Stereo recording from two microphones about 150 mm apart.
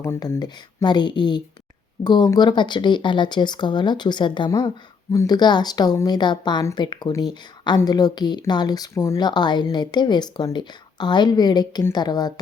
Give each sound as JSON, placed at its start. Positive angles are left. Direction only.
{"t": 0.0, "sound": "speech", "side_deg": 20}